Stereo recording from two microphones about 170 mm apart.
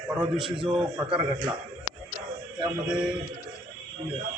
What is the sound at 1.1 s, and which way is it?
Speech, 25° right (ahead or behind).